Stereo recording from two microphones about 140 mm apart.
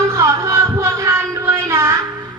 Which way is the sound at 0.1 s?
20° right (ahead or behind).